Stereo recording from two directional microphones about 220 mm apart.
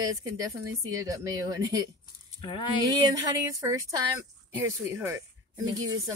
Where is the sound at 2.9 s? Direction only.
15° right (ahead or behind).